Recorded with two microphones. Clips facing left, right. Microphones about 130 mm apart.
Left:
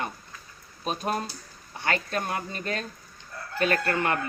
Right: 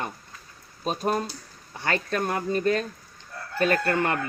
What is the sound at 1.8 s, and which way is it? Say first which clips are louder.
Speech: right 2 dB; 40° right (ahead or behind).